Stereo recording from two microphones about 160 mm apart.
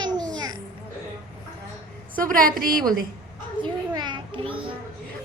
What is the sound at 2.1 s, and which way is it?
Speech, 60° right (ahead or behind).